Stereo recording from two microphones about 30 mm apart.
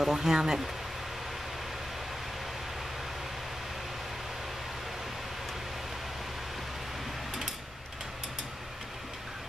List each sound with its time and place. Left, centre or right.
0.0 s speech: centre